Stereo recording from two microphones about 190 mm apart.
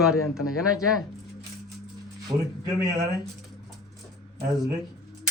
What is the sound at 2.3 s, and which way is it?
Speech, 20° right (ahead or behind).